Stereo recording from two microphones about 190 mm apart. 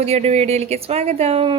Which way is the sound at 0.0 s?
30° right (ahead or behind).